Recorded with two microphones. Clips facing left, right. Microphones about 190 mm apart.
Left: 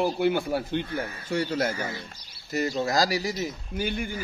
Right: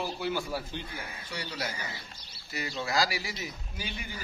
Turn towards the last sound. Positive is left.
turn(degrees=55)  # may be behind; listen again after turning